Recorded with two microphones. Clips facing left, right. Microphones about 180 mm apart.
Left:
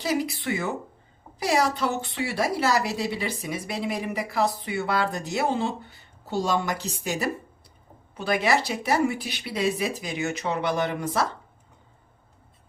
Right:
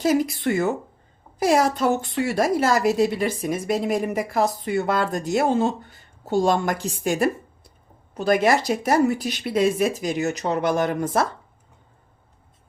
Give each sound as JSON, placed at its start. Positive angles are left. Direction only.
{"t": 0.0, "sound": "a woman's voice", "side_deg": -45}